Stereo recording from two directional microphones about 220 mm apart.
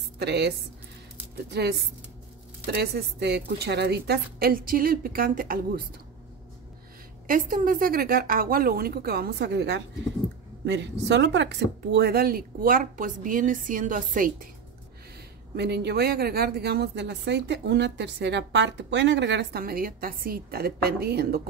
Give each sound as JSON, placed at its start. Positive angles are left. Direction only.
{"t": 0.2, "sound": "speech", "side_deg": -50}
{"t": 7.2, "sound": "speech", "side_deg": -40}
{"t": 15.5, "sound": "speech", "side_deg": -50}